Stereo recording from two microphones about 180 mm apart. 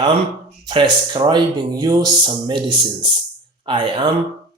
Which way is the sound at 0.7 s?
25° right (ahead or behind).